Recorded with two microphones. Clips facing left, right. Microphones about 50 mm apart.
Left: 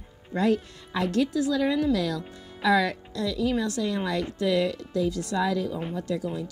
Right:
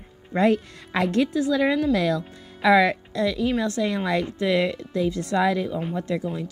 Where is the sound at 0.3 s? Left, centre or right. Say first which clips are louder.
Right 4 dB; right.